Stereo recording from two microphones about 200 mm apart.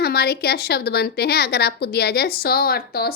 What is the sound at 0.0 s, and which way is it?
Speech, 55° left (ahead or behind).